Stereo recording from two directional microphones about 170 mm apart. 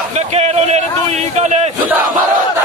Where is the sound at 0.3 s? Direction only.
40° right (ahead or behind).